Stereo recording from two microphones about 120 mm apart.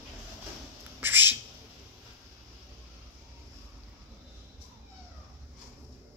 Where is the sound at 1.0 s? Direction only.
15° right (ahead or behind).